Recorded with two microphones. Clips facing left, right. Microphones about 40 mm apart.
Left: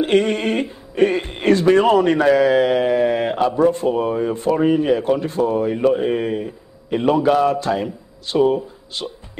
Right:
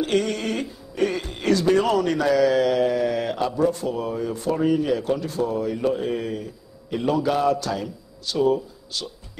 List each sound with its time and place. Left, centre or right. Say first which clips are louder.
0.0 s speech: left 6 dB; left